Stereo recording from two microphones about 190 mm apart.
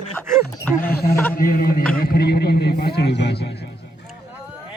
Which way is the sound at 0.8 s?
55° left (ahead or behind).